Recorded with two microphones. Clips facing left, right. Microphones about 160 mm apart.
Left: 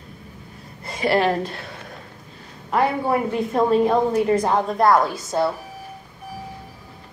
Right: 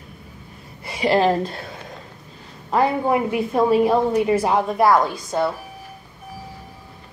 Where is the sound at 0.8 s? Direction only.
10° right (ahead or behind).